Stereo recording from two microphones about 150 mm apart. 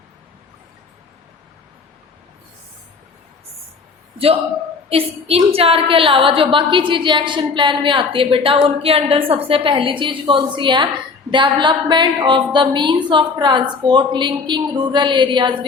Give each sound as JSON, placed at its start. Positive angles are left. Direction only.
{"t": 4.9, "sound": "a woman's voice", "side_deg": -40}